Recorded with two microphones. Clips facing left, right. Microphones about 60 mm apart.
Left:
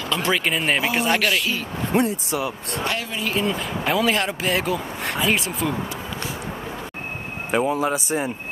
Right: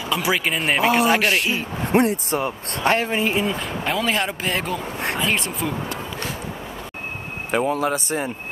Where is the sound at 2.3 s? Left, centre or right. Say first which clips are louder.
Right 1 dB; right.